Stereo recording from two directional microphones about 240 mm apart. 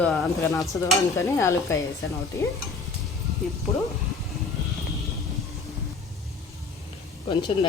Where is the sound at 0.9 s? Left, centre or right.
Centre.